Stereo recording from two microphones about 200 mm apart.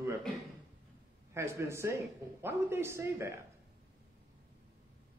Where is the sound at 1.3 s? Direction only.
15° right (ahead or behind).